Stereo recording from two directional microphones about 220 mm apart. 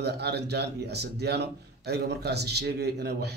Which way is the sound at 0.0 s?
50° right (ahead or behind).